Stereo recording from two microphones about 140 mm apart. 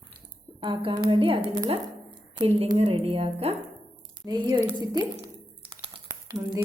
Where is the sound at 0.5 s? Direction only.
35° right (ahead or behind).